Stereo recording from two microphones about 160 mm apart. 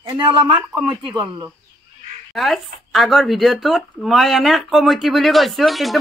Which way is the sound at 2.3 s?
Centre (ahead or behind).